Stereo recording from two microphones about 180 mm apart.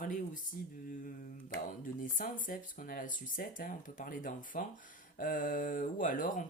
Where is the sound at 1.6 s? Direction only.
50° left (ahead or behind).